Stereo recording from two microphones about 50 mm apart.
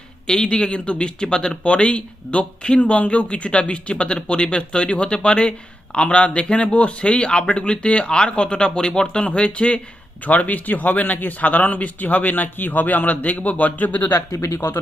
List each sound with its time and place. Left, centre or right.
0.3 s speech: centre
10.2 s a man's voice: left
14.3 s speech: left